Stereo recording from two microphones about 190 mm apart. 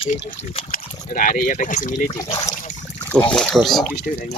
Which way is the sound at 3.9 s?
50° left (ahead or behind).